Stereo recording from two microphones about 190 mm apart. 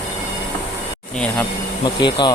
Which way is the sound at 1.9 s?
25° left (ahead or behind).